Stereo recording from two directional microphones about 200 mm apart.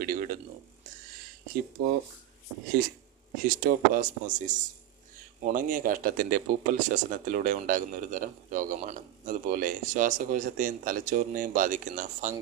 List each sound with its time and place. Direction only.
0.0 s a sound: 45° right (ahead or behind)
1.8 s speech: 50° right (ahead or behind)
3.4 s speech: 45° right (ahead or behind)